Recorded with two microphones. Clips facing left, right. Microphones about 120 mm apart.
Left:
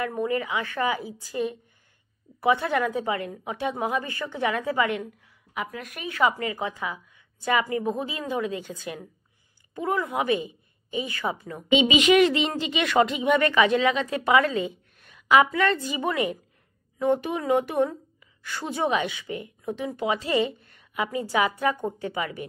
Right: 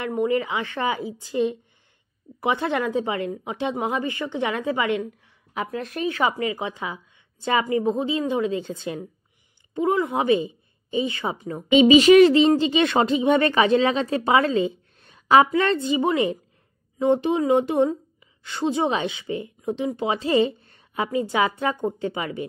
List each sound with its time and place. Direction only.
0.0 s a woman's voice: 20° right (ahead or behind)
11.7 s a woman's voice: 35° right (ahead or behind)